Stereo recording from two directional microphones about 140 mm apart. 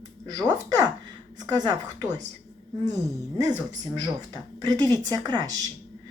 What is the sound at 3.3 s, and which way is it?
A woman's voice, 25° right (ahead or behind).